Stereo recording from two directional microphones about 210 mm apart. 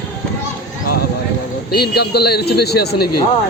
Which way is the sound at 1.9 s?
50° left (ahead or behind).